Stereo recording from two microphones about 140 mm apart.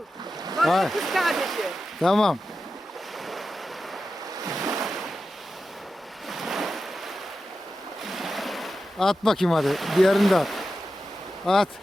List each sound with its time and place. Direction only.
0.5 s speech: centre (ahead or behind)
4.4 s ocean: 25° right (ahead or behind)
4.8 s ocean: centre (ahead or behind)
6.2 s waves: centre (ahead or behind)
8.0 s ocean: centre (ahead or behind)
11.4 s speech: centre (ahead or behind)